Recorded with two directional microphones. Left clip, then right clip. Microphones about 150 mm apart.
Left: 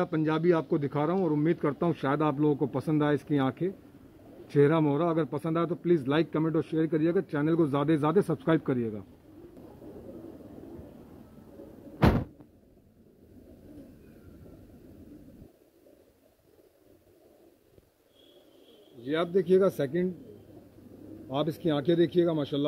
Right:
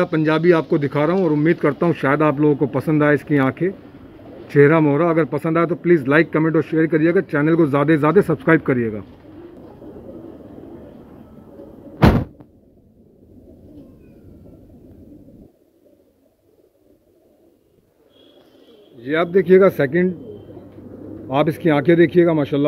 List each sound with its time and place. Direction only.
0.0 s speech: centre (ahead or behind)
18.9 s a man's voice: 45° left (ahead or behind)
21.9 s speech: 40° left (ahead or behind)